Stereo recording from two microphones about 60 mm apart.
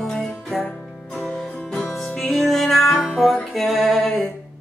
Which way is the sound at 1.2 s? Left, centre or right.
Centre.